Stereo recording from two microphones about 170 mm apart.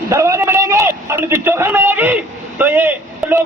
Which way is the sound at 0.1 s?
15° right (ahead or behind).